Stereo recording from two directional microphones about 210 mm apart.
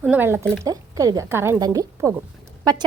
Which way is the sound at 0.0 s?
10° right (ahead or behind).